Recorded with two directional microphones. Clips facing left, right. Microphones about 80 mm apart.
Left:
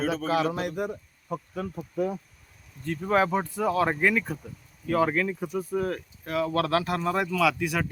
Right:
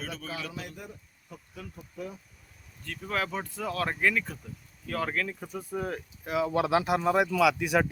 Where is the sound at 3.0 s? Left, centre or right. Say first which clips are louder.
Left 8 dB; left.